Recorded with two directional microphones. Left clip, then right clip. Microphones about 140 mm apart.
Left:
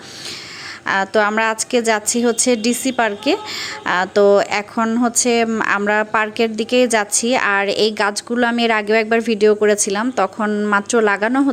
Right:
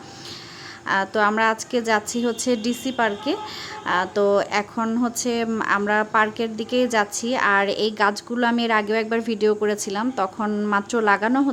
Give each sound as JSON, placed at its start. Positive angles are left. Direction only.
{"t": 0.9, "sound": "a woman's voice", "side_deg": 25}